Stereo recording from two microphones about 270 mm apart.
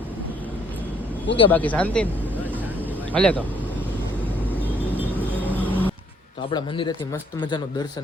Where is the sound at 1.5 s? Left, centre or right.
Centre.